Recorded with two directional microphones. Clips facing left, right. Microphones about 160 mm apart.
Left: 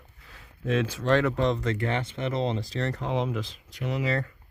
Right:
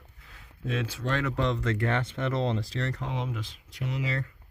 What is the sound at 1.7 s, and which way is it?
Speech, 15° left (ahead or behind).